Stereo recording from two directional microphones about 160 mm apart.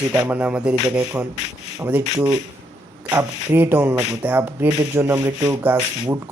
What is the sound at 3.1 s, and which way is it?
Speech, 15° right (ahead or behind).